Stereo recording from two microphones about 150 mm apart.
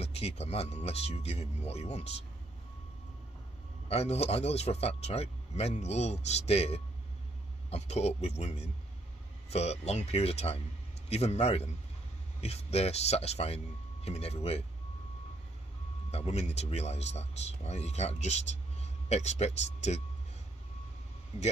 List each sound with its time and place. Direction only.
0.0 s speech: 45° left (ahead or behind)
3.9 s speech: 45° left (ahead or behind)
16.1 s speech: 45° left (ahead or behind)